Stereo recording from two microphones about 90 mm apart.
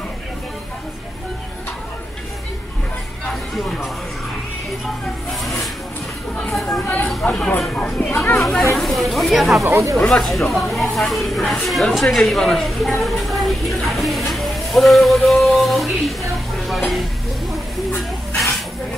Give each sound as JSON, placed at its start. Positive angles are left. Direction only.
{"t": 3.5, "sound": "speech", "side_deg": 0}
{"t": 5.4, "sound": "music", "side_deg": 0}
{"t": 6.5, "sound": "chatter", "side_deg": 0}
{"t": 7.2, "sound": "speech", "side_deg": 10}
{"t": 8.4, "sound": "a sound", "side_deg": 5}
{"t": 8.7, "sound": "speech", "side_deg": 0}
{"t": 9.6, "sound": "speech", "side_deg": -35}
{"t": 9.9, "sound": "speech", "side_deg": 5}
{"t": 17.9, "sound": "snake", "side_deg": 0}